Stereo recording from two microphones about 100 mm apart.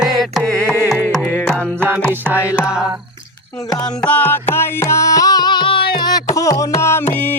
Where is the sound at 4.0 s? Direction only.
15° left (ahead or behind); by 6.0 s 55° left (ahead or behind).